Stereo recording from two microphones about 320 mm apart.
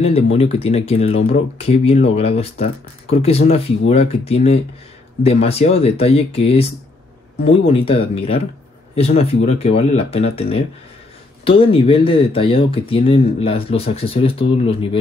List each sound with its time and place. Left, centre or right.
0.0 s speech: centre